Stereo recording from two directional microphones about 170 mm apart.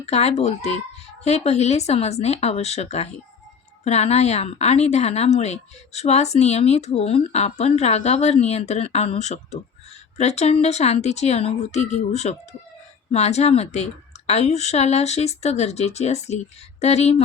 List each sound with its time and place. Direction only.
0.0 s a woman's voice: 40° left (ahead or behind)